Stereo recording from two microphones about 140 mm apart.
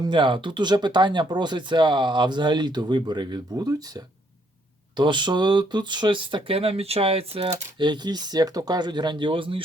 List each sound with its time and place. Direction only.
0.0 s speech: 35° right (ahead or behind)